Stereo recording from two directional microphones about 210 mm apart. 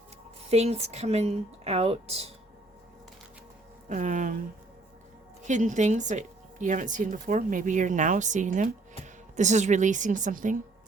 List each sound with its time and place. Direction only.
0.5 s a woman's voice: 30° right (ahead or behind)
3.8 s speech: 35° right (ahead or behind)
5.5 s speech: 35° right (ahead or behind)